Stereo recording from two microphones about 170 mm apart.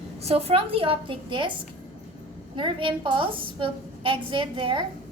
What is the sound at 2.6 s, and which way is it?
A woman's voice, 30° right (ahead or behind).